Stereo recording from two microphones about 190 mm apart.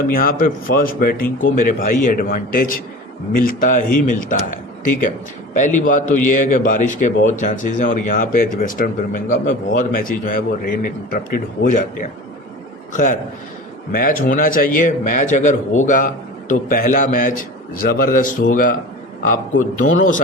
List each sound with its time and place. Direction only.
0.1 s a man's voice: 50° left (ahead or behind)